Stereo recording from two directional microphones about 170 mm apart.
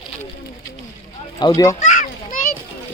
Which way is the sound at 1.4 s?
20° left (ahead or behind).